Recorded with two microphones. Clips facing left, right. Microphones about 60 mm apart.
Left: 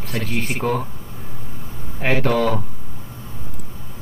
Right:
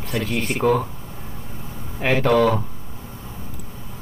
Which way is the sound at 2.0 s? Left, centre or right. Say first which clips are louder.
Right 2 dB; centre.